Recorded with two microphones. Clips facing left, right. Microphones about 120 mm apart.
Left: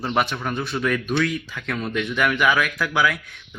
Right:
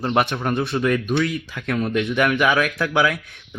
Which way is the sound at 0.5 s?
25° right (ahead or behind).